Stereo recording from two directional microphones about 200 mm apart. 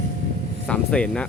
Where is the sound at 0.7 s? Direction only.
5° left (ahead or behind).